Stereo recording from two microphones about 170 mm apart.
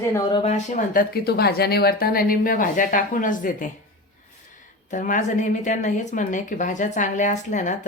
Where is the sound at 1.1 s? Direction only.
65° left (ahead or behind); by 3.7 s 50° left (ahead or behind).